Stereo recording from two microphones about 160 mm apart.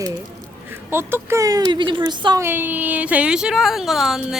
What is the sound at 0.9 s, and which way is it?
Speech, 15° right (ahead or behind).